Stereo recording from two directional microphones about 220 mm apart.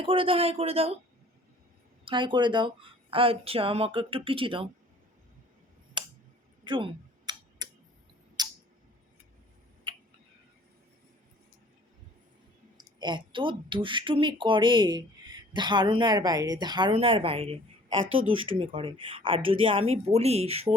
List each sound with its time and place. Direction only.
0.0 s speech: 25° right (ahead or behind)
2.0 s speech: 20° right (ahead or behind)
6.0 s a sound: 20° right (ahead or behind)
9.9 s tick-tock: 20° right (ahead or behind)
12.7 s speech: 20° right (ahead or behind)